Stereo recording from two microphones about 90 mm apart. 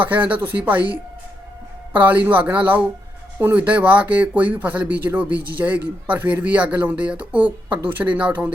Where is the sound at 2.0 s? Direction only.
15° right (ahead or behind).